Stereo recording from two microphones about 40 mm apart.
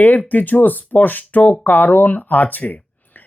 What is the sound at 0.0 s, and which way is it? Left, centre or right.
Speech, left.